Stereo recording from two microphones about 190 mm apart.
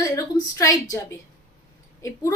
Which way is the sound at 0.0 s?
15° left (ahead or behind).